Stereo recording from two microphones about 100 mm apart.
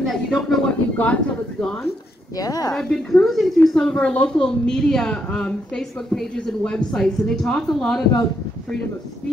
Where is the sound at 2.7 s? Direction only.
5° left (ahead or behind).